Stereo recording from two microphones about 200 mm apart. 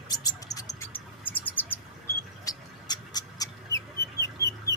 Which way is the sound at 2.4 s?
20° left (ahead or behind).